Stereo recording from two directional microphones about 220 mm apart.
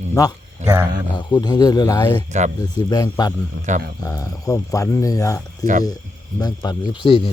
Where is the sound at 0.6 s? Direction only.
30° right (ahead or behind).